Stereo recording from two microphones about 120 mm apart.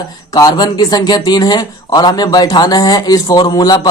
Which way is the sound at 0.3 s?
30° left (ahead or behind).